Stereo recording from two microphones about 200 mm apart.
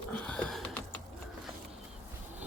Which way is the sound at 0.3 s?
5° left (ahead or behind).